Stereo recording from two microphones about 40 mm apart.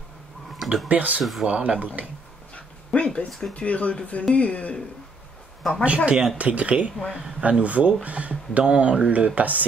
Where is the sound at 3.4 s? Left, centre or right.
Left.